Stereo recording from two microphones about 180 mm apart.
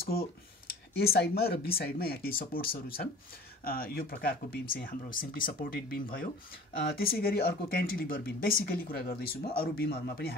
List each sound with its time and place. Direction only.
0.0 s speech: 55° left (ahead or behind)